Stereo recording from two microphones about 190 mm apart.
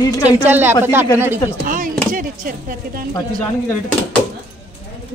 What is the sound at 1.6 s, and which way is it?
Chopping, 45° right (ahead or behind).